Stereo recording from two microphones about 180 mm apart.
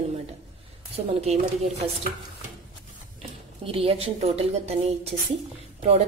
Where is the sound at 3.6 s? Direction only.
30° right (ahead or behind).